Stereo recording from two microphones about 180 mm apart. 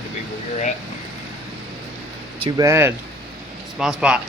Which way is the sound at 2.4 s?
20° right (ahead or behind).